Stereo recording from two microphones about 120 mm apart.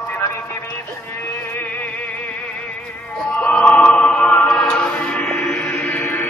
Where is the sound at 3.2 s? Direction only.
10° left (ahead or behind).